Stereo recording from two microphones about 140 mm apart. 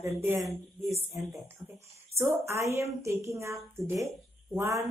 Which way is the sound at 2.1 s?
20° right (ahead or behind).